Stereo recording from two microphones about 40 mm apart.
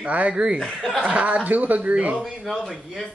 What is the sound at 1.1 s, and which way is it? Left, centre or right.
Speech, right.